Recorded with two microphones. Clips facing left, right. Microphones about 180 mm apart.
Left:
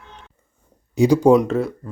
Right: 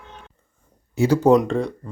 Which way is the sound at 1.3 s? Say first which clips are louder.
Left 1 dB; 5° left (ahead or behind).